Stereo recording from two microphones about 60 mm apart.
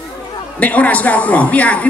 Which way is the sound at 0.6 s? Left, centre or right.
Left.